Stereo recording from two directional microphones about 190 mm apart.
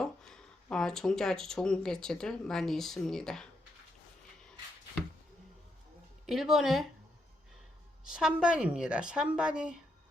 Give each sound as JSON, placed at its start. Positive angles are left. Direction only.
{"t": 0.0, "sound": "speech", "side_deg": 5}
{"t": 6.2, "sound": "a woman's voice", "side_deg": 0}
{"t": 8.0, "sound": "a woman's voice", "side_deg": -5}